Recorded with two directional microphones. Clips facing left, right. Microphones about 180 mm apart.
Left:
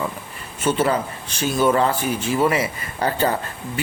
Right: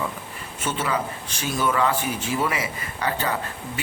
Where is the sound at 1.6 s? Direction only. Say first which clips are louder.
Left 5 dB; 35° left (ahead or behind).